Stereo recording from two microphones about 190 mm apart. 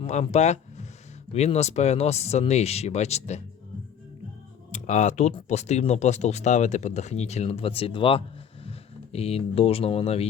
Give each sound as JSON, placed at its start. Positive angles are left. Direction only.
{"t": 0.0, "sound": "speech", "side_deg": 35}
{"t": 4.7, "sound": "speech", "side_deg": 40}